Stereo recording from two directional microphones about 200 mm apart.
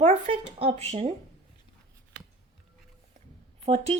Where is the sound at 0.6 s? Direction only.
30° right (ahead or behind).